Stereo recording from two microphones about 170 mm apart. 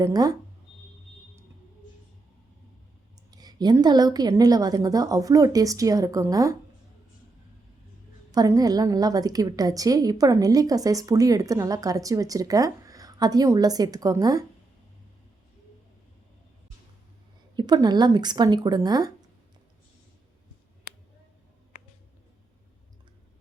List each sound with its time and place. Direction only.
0.0 s a woman's voice: 20° right (ahead or behind)
3.3 s a woman's voice: 25° right (ahead or behind)
8.3 s a woman's voice: 20° right (ahead or behind)
17.5 s a woman's voice: 25° right (ahead or behind)